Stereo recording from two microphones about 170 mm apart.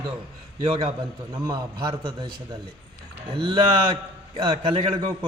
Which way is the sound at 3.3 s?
25° right (ahead or behind).